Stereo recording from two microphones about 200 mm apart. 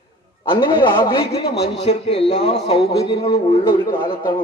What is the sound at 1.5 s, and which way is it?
Speech, 55° left (ahead or behind).